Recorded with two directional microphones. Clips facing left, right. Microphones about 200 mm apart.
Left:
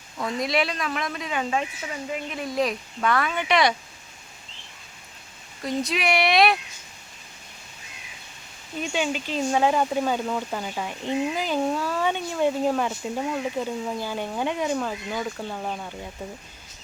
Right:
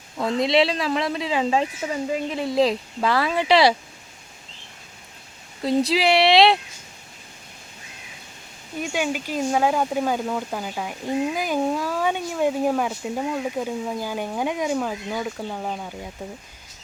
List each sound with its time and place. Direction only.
0.2 s speech: 25° right (ahead or behind)
5.6 s speech: 30° right (ahead or behind)
8.8 s speech: 10° right (ahead or behind)